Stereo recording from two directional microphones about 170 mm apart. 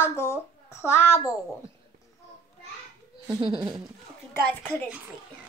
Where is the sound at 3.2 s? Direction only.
30° right (ahead or behind).